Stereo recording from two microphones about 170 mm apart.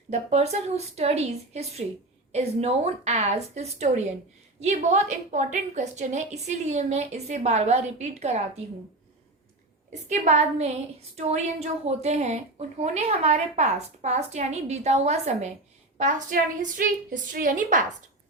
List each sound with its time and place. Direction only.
0.1 s a woman's voice: 40° right (ahead or behind)
9.9 s a woman's voice: 45° right (ahead or behind)